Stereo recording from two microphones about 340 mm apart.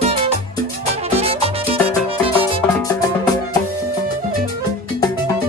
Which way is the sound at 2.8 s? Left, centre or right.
Centre.